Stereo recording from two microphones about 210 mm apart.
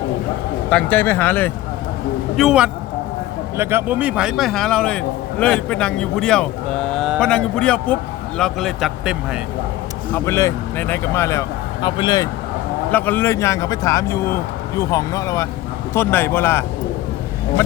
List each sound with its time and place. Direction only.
0.7 s speech: 5° left (ahead or behind)
2.3 s a man's voice: centre (ahead or behind)
10.2 s speech: 15° left (ahead or behind)
12.9 s speech: 10° left (ahead or behind)